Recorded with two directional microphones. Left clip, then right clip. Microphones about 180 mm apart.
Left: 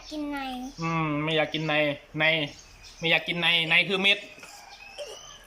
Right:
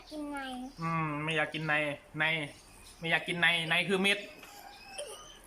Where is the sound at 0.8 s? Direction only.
15° left (ahead or behind).